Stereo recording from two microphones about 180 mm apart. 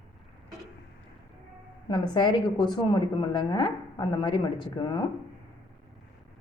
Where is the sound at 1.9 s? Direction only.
25° left (ahead or behind).